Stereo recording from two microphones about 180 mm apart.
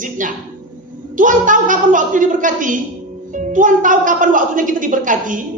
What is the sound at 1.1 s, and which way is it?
A man's voice, 45° right (ahead or behind).